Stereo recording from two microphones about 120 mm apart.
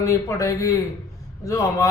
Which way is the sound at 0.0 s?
25° left (ahead or behind).